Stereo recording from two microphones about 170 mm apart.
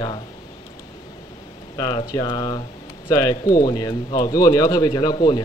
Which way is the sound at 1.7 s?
25° left (ahead or behind).